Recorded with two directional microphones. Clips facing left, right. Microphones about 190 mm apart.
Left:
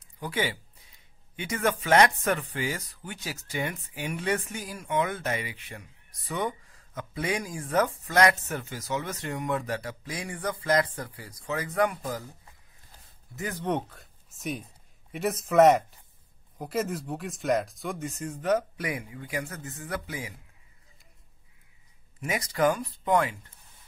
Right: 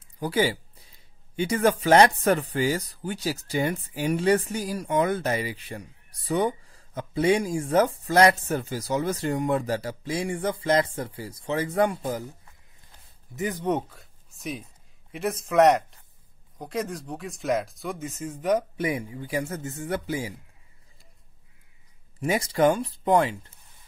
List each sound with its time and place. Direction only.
0.2 s a sound: 35° right (ahead or behind)
1.3 s speech: 30° right (ahead or behind)
13.4 s speech: 15° right (ahead or behind)
18.8 s speech: 25° right (ahead or behind)
22.2 s speech: 30° right (ahead or behind)